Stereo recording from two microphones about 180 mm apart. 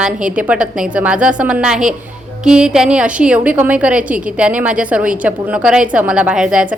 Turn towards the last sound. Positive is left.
turn(degrees=-5)  # may be behind; listen again after turning